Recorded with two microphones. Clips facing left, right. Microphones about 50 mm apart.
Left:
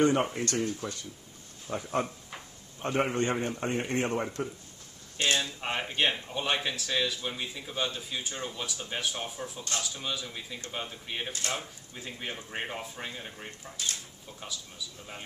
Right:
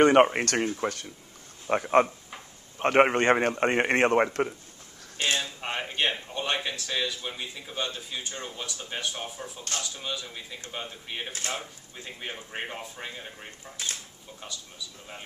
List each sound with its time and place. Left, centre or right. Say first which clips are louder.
0.0 s a man's voice: right 7 dB; right
5.4 s speech: even; centre